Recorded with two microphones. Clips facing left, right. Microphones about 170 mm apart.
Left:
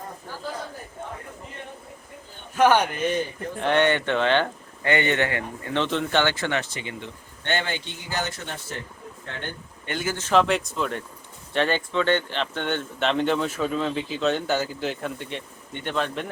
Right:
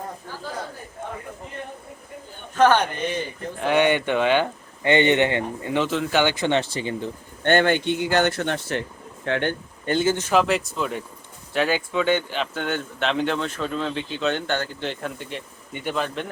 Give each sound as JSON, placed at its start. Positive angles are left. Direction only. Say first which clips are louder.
{"t": 2.6, "sound": "speech", "louder": "right 1 dB", "side_deg": 10}
{"t": 3.6, "sound": "speech", "louder": "right 2 dB", "side_deg": -10}
{"t": 5.7, "sound": "speech", "louder": "right 1 dB", "side_deg": -5}
{"t": 6.2, "sound": "speech", "louder": "right 3 dB", "side_deg": -15}
{"t": 6.5, "sound": "speech", "louder": "right 6 dB", "side_deg": -30}
{"t": 7.4, "sound": "speech", "louder": "right 9 dB", "side_deg": -55}
{"t": 9.8, "sound": "speech", "louder": "right 8 dB", "side_deg": -30}
{"t": 10.2, "sound": "speech", "louder": "even", "side_deg": -5}